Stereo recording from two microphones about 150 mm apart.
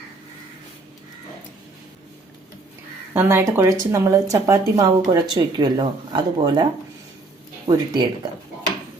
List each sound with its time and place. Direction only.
3.1 s speech: 15° right (ahead or behind)
7.7 s speech: 25° right (ahead or behind)